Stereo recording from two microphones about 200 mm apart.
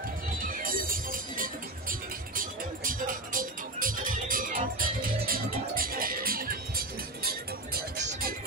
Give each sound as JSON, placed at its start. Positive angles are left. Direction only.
{"t": 0.3, "sound": "music", "side_deg": -45}
{"t": 8.1, "sound": "music", "side_deg": -45}